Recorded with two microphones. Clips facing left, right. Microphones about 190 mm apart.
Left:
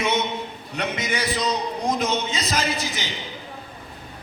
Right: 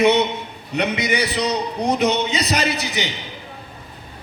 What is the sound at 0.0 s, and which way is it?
A man's voice, 65° right (ahead or behind).